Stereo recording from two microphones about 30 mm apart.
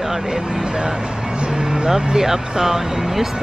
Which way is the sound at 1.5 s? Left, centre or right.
Right.